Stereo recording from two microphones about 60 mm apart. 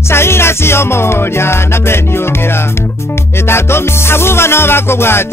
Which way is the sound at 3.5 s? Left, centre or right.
Left.